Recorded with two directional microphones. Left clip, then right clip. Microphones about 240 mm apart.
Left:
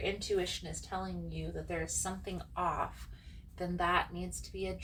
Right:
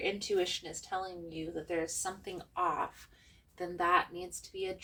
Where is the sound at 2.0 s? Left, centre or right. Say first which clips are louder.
Right 1 dB; right.